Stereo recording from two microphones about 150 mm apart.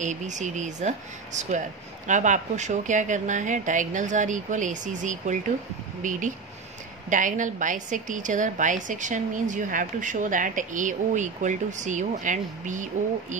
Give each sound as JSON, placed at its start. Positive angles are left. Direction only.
{"t": 0.0, "sound": "a woman's voice", "side_deg": -55}